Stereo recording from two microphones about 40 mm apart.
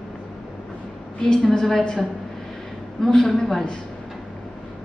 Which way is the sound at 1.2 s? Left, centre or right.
Centre.